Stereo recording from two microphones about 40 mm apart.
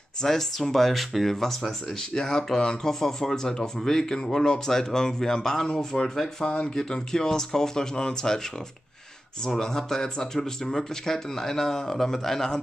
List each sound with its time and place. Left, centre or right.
0.2 s speech: centre
6.5 s speech: centre
9.6 s speech: centre